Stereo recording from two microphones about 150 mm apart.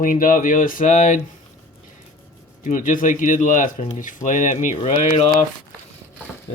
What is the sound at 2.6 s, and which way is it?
Speech, 60° left (ahead or behind).